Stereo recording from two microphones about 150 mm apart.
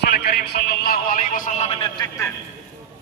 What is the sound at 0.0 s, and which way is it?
Speech, 90° left.